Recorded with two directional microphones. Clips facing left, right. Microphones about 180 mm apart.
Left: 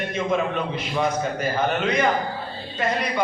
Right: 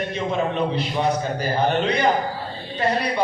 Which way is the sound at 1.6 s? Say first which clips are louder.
Right 2 dB; 35° right (ahead or behind).